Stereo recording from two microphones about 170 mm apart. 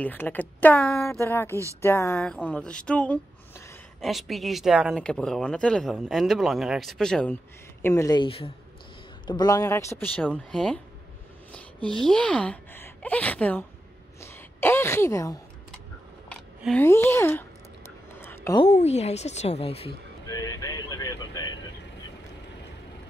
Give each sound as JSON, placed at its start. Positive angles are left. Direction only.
{"t": 0.0, "sound": "speech", "side_deg": 10}
{"t": 1.0, "sound": "speech", "side_deg": 15}
{"t": 2.1, "sound": "speech", "side_deg": 5}
{"t": 7.8, "sound": "speech", "side_deg": 15}
{"t": 12.0, "sound": "a woman's voice", "side_deg": 5}
{"t": 16.3, "sound": "speech", "side_deg": 5}
{"t": 18.2, "sound": "a sound", "side_deg": 15}
{"t": 18.6, "sound": "speech", "side_deg": 40}
{"t": 20.2, "sound": "vehicle", "side_deg": 20}